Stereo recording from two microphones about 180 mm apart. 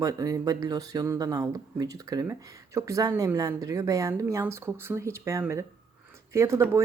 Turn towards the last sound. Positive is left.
turn(degrees=-15)  # may be behind; listen again after turning